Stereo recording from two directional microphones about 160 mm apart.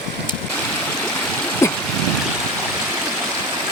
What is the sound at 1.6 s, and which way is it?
Stream, 15° left (ahead or behind).